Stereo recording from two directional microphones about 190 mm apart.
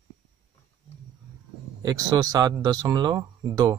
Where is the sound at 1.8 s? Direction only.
20° right (ahead or behind).